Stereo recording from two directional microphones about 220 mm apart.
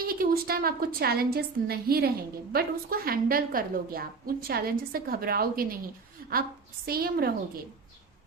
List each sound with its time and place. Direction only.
0.0 s a woman's voice: 40° right (ahead or behind)
6.8 s a woman's voice: 45° right (ahead or behind)